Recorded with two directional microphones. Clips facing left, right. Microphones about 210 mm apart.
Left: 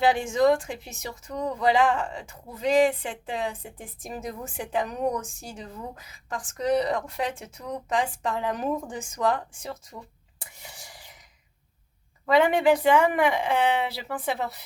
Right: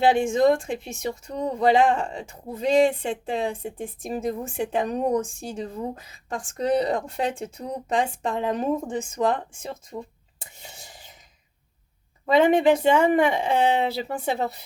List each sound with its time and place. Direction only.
0.1 s speech: 25° right (ahead or behind)
10.6 s whispering: 25° right (ahead or behind)
12.2 s speech: 25° right (ahead or behind)